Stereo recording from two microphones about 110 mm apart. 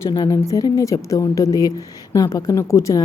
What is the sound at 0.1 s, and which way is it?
A woman's voice, 30° left (ahead or behind).